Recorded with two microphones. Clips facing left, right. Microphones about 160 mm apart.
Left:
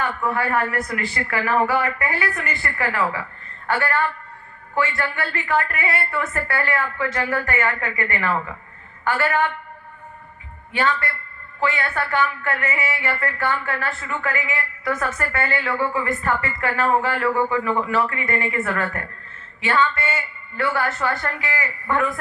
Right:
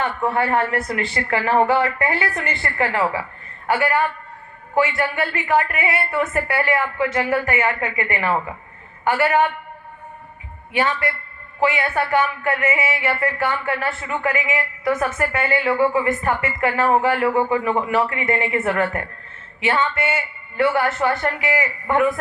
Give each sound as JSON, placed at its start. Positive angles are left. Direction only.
{"t": 0.0, "sound": "a man's voice", "side_deg": -25}
{"t": 10.7, "sound": "a man's voice", "side_deg": -20}